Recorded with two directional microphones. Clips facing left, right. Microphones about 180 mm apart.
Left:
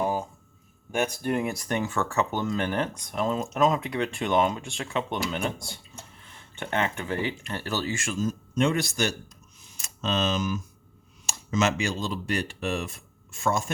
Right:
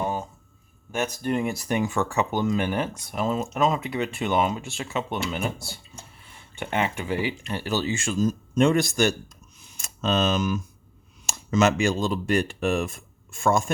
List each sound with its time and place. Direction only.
0.0 s a sound: 5° left (ahead or behind)
0.9 s speech: 10° left (ahead or behind); by 8.3 s 30° right (ahead or behind)
8.3 s speech: 45° right (ahead or behind)